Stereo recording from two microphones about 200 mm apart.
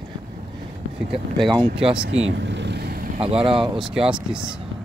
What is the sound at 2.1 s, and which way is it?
Vehicle, 75° right (ahead or behind).